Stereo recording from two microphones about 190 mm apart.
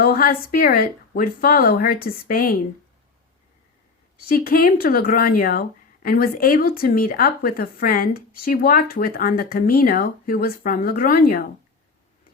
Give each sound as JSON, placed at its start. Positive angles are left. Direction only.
{"t": 0.0, "sound": "speech", "side_deg": 50}
{"t": 4.3, "sound": "speech", "side_deg": 50}